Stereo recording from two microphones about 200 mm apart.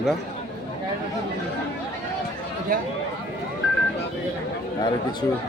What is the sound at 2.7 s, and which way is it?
Speech, 45° right (ahead or behind).